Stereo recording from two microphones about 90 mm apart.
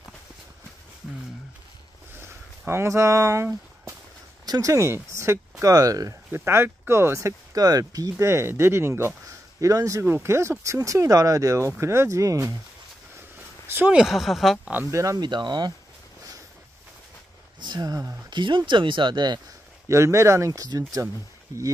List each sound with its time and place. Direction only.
2.1 s a sound: 25° right (ahead or behind)
4.5 s speech: 40° right (ahead or behind)
6.3 s speech: 25° right (ahead or behind)
9.6 s speech: 40° right (ahead or behind)
13.7 s a sound: 25° right (ahead or behind)
13.9 s speech: centre (ahead or behind)
14.9 s speech: 35° right (ahead or behind)
15.1 s speech: 55° right (ahead or behind)
17.6 s speech: 50° right (ahead or behind)
18.3 s speech: 60° right (ahead or behind)
19.9 s speech: 35° right (ahead or behind)